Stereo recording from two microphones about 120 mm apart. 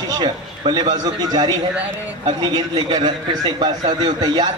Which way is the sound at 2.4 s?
35° right (ahead or behind).